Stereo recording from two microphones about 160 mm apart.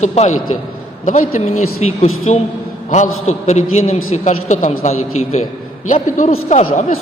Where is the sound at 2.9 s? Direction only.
50° left (ahead or behind).